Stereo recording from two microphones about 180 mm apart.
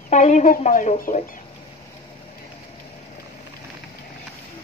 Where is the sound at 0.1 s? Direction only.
40° left (ahead or behind).